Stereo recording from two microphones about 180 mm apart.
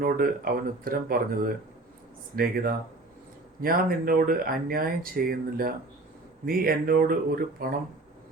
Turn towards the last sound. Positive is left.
turn(degrees=-55)  # may be behind; listen again after turning